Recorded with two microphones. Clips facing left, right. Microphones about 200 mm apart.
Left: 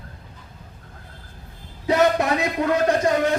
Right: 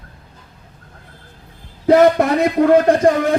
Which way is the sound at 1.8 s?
55° right (ahead or behind).